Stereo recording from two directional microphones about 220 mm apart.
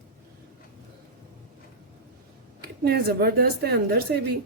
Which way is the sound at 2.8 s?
45° right (ahead or behind).